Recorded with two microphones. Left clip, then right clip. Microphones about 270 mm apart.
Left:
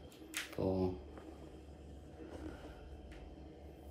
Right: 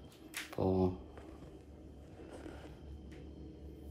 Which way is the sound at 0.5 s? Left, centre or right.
Right.